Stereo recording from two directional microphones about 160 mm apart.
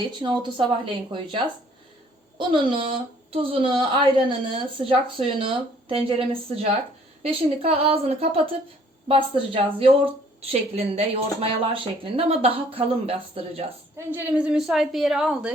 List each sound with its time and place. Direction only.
0.2 s speech: 30° right (ahead or behind)
14.1 s a woman's voice: 10° right (ahead or behind)